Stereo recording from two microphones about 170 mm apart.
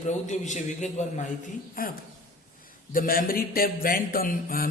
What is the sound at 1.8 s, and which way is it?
A man's voice, 55° left (ahead or behind).